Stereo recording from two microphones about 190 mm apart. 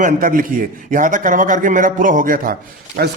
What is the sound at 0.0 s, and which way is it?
A man's voice, 45° right (ahead or behind).